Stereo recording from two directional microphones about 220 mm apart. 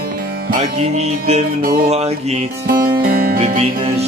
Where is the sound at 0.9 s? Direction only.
30° right (ahead or behind).